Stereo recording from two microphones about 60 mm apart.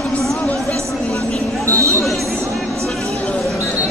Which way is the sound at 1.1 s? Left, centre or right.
Left.